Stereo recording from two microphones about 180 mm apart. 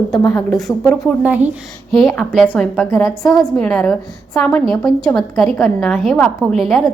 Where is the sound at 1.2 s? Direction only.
10° right (ahead or behind).